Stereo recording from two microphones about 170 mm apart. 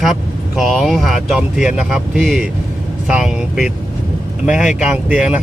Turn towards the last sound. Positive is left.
turn(degrees=-5)  # may be behind; listen again after turning